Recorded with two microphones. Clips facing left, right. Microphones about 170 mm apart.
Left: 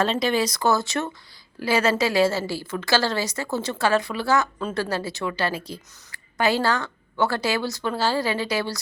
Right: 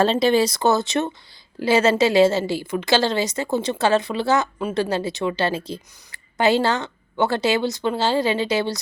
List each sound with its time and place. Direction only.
0.0 s a woman's voice: 30° right (ahead or behind)